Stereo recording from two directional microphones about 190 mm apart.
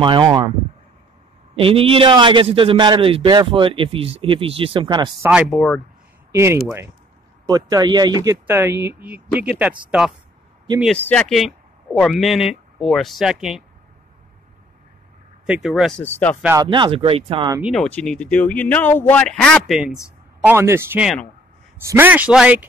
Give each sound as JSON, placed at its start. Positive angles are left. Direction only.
{"t": 0.0, "sound": "a man's voice", "side_deg": -25}
{"t": 1.6, "sound": "a man's voice", "side_deg": -30}
{"t": 5.3, "sound": "speech", "side_deg": -5}
{"t": 6.3, "sound": "speech", "side_deg": -15}
{"t": 15.4, "sound": "speech", "side_deg": -5}
{"t": 16.0, "sound": "speech", "side_deg": 10}
{"t": 16.6, "sound": "a man's voice", "side_deg": -25}
{"t": 17.5, "sound": "speech", "side_deg": -10}
{"t": 17.7, "sound": "speech", "side_deg": 5}
{"t": 20.4, "sound": "speech", "side_deg": -15}